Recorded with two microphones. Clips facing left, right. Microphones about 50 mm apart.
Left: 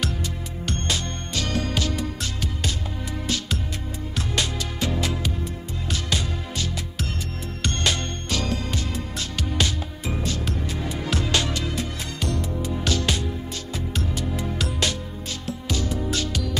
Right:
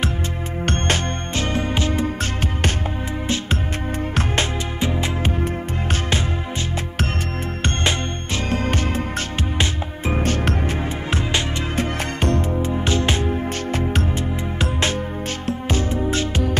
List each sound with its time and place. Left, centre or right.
0.7 s music: right
4.7 s music: right
7.6 s music: right